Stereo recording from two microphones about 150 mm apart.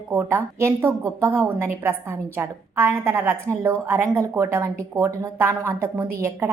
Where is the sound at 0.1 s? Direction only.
15° right (ahead or behind).